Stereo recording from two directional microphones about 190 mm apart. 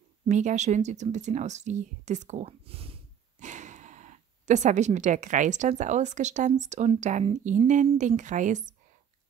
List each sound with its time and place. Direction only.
0.3 s speech: 40° right (ahead or behind)